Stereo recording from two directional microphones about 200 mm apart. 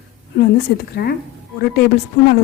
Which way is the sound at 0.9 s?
50° left (ahead or behind).